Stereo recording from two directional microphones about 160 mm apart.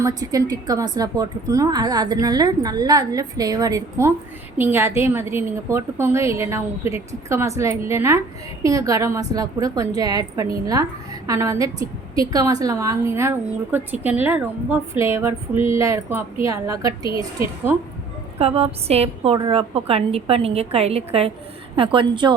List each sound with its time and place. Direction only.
0.0 s a woman's voice: 25° right (ahead or behind)
18.3 s a woman's voice: 40° right (ahead or behind)